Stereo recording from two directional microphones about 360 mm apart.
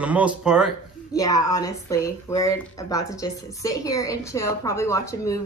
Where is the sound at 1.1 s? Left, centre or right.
Centre.